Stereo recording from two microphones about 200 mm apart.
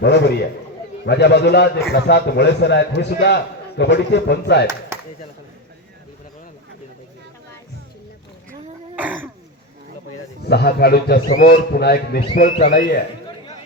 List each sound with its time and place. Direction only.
0.0 s a man's voice: 55° left (ahead or behind)
9.0 s throat clearing: 10° right (ahead or behind)
10.4 s a man's voice: 55° left (ahead or behind)